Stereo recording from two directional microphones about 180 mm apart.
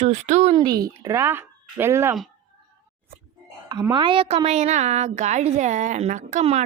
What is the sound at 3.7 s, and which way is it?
A woman's voice, 25° right (ahead or behind).